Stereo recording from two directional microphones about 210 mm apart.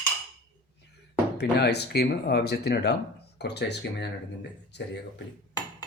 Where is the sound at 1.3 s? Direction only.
50° left (ahead or behind).